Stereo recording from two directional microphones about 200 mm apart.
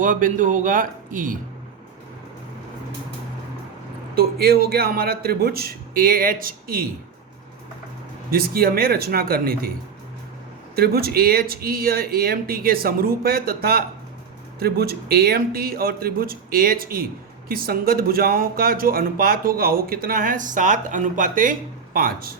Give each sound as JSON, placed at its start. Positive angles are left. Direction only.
{"t": 0.0, "sound": "speech", "side_deg": -40}
{"t": 4.1, "sound": "speech", "side_deg": -50}
{"t": 8.3, "sound": "speech", "side_deg": -50}
{"t": 10.8, "sound": "speech", "side_deg": -50}